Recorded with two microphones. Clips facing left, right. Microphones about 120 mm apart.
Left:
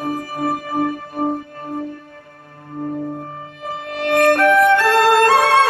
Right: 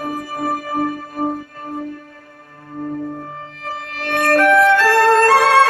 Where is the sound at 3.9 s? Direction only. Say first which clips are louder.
Left 2 dB; 20° left (ahead or behind).